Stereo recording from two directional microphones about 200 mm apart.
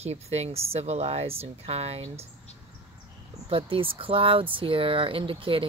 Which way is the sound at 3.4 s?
25° right (ahead or behind).